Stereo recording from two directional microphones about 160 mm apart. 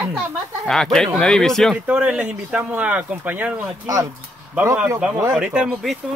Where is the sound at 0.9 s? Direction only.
Centre (ahead or behind).